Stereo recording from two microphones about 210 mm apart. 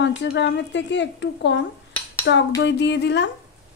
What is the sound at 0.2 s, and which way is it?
Speech, 55° left (ahead or behind).